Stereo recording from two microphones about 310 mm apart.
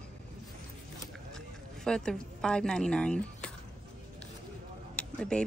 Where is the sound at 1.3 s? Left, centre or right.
Centre.